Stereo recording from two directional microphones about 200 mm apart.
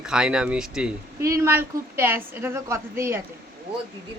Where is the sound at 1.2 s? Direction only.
15° right (ahead or behind).